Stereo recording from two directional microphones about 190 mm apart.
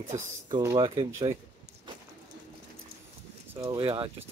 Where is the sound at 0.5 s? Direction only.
15° right (ahead or behind).